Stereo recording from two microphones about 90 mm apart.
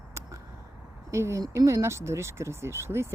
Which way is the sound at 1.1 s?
30° right (ahead or behind).